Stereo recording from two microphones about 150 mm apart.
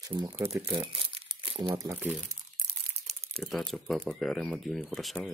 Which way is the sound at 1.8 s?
20° right (ahead or behind).